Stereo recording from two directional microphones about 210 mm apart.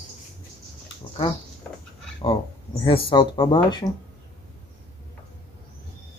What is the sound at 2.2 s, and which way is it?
Speech, 25° left (ahead or behind).